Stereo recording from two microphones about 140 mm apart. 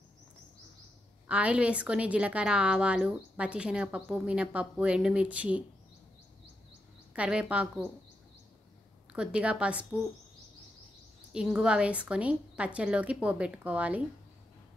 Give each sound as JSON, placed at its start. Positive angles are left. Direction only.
{"t": 1.3, "sound": "a woman's voice", "side_deg": -10}
{"t": 7.2, "sound": "a woman's voice", "side_deg": -5}
{"t": 9.1, "sound": "a woman's voice", "side_deg": -5}
{"t": 11.3, "sound": "a woman's voice", "side_deg": -5}